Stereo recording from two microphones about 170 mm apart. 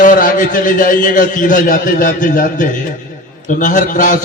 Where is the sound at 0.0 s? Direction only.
50° left (ahead or behind).